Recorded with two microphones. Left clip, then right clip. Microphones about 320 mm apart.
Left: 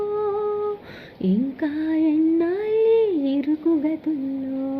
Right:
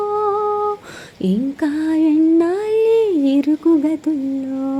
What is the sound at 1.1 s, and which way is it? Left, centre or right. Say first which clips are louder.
Music: right 4 dB; right.